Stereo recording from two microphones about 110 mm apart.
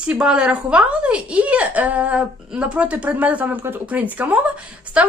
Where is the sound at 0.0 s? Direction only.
10° right (ahead or behind).